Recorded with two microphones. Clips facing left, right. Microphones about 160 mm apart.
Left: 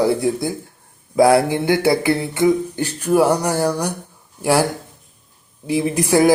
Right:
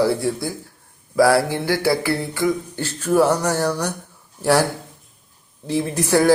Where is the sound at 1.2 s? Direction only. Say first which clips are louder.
Left 3 dB; 20° left (ahead or behind).